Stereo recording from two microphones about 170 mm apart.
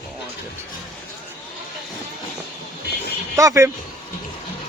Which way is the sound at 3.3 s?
15° right (ahead or behind).